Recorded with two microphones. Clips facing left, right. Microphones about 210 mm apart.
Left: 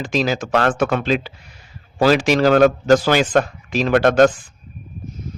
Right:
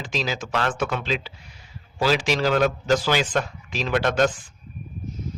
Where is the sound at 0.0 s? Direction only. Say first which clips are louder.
Left 8 dB; 50° left (ahead or behind).